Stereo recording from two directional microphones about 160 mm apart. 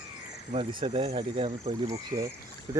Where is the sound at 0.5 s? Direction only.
30° right (ahead or behind).